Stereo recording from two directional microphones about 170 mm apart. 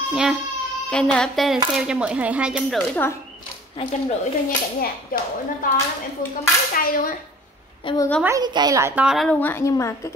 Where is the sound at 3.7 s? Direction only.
40° left (ahead or behind).